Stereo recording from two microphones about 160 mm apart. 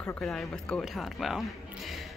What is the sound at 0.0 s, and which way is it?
A woman's voice, 5° left (ahead or behind).